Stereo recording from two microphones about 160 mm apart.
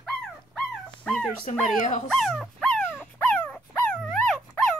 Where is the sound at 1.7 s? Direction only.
55° left (ahead or behind).